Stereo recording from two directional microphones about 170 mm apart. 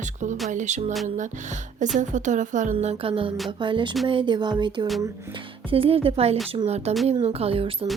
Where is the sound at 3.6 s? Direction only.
30° right (ahead or behind).